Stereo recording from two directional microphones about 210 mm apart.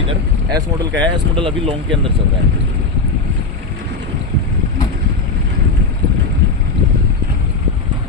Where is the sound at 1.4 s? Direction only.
25° right (ahead or behind).